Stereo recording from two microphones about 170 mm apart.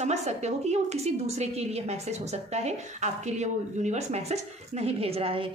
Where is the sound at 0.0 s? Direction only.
40° right (ahead or behind).